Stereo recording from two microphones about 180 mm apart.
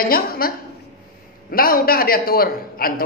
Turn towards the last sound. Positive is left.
turn(degrees=55)  # may be behind; listen again after turning